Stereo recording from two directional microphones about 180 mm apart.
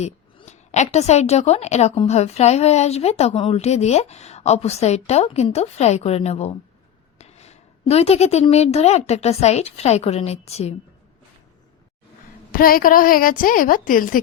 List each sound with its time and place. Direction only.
0.0 s a woman's voice: 40° left (ahead or behind)
12.5 s a woman's voice: 55° left (ahead or behind)